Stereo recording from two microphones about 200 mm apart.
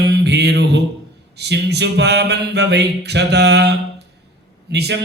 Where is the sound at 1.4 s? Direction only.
55° right (ahead or behind).